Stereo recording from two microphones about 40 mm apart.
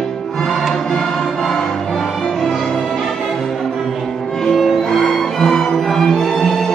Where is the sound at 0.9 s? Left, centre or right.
Centre.